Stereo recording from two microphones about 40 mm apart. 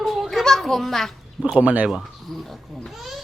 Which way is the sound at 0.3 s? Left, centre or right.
Centre.